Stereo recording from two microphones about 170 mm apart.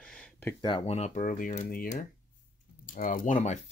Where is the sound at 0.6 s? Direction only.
35° left (ahead or behind).